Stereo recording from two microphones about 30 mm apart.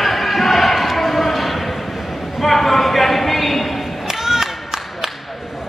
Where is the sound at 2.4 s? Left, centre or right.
Centre.